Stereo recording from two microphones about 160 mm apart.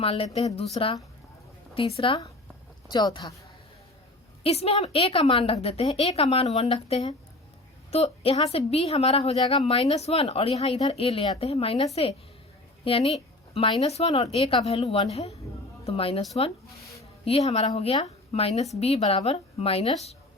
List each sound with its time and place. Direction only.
0.0 s a woman's voice: 35° left (ahead or behind)
2.0 s a woman's voice: 35° left (ahead or behind)
4.4 s a woman's voice: 40° left (ahead or behind)
17.0 s a sound: 40° left (ahead or behind)
17.7 s a woman's voice: 40° left (ahead or behind)